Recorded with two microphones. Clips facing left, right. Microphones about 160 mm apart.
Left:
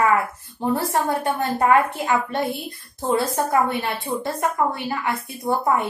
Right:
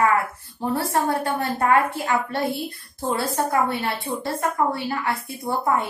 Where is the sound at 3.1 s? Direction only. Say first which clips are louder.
Left 3 dB; 20° left (ahead or behind).